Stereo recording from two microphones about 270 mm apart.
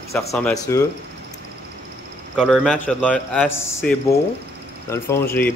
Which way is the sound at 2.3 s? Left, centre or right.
Centre.